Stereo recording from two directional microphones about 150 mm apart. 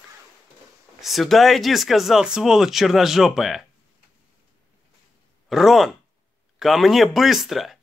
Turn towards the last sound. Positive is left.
turn(degrees=0)  # may be behind; listen again after turning